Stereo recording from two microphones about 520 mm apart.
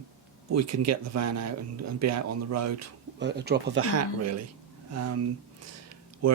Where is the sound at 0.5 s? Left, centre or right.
Right.